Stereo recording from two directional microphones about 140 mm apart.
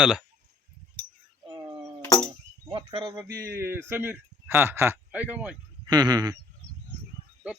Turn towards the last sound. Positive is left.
turn(degrees=-30)  # may be behind; listen again after turning